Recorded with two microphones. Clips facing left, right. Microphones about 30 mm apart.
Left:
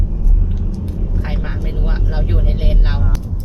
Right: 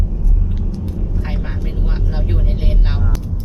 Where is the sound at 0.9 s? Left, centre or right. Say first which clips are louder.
Even; centre.